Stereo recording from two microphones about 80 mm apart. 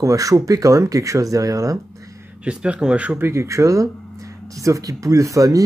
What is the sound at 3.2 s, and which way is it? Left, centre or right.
Speech, right.